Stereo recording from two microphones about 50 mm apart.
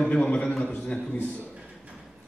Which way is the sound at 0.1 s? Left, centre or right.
Left.